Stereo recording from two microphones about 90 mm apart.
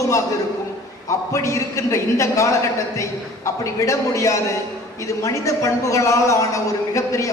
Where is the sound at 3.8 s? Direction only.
35° left (ahead or behind).